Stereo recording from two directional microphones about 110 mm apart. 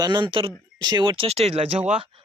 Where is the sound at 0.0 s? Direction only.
45° right (ahead or behind); by 1.8 s 70° right (ahead or behind).